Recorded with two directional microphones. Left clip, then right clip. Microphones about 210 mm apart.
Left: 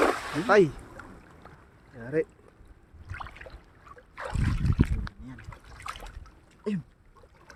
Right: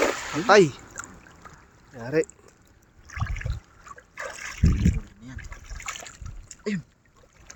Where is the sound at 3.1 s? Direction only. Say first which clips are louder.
Right 5 dB; 15° right (ahead or behind).